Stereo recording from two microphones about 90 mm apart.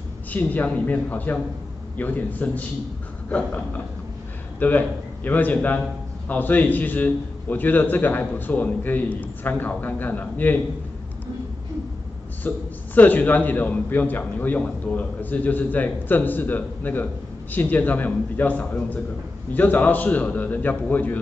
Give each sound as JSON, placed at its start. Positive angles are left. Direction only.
{"t": 0.3, "sound": "a man's voice", "side_deg": 20}
{"t": 12.4, "sound": "a man's voice", "side_deg": 20}